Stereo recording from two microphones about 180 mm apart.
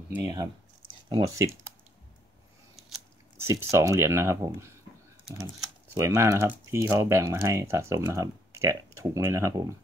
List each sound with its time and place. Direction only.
0.1 s speech: 20° right (ahead or behind)
3.3 s speech: 15° right (ahead or behind)
5.9 s speech: 15° right (ahead or behind)